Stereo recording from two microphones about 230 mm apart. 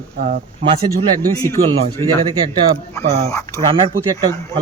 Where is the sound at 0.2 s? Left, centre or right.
Right.